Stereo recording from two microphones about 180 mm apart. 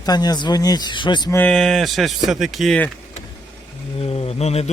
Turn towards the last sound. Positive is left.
turn(degrees=35)  # may be behind; listen again after turning